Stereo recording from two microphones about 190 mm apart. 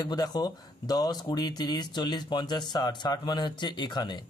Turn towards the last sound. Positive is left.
turn(degrees=25)  # may be behind; listen again after turning